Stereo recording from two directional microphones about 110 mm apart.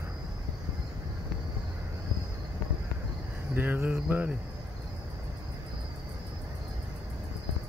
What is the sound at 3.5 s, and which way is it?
Speech, 20° right (ahead or behind).